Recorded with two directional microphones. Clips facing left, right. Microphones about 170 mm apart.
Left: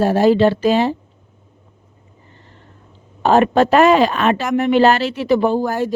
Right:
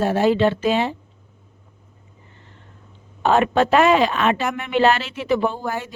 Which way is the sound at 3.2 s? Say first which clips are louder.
Left 4 dB; 40° left (ahead or behind).